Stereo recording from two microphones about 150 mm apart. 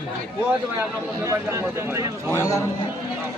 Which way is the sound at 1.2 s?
20° right (ahead or behind).